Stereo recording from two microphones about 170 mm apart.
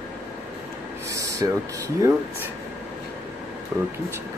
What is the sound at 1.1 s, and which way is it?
Speech, 20° right (ahead or behind).